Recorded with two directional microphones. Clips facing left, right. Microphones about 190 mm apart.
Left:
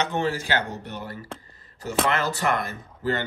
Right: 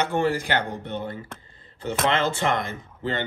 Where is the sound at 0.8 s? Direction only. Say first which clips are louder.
Right 4 dB; 25° right (ahead or behind).